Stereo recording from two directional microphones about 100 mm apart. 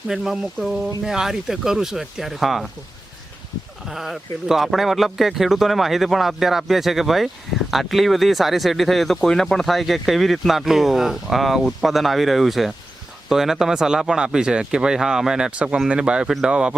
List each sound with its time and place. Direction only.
0.1 s speech: 5° right (ahead or behind)
3.8 s speech: centre (ahead or behind)